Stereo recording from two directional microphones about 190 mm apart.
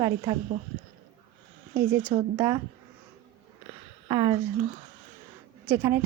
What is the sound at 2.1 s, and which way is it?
Speech, 20° right (ahead or behind).